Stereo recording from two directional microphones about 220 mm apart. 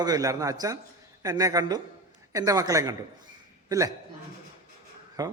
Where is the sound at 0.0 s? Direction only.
15° right (ahead or behind).